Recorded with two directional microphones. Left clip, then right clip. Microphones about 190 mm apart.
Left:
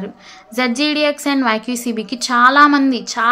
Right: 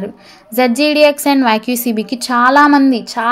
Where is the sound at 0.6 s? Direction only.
25° right (ahead or behind).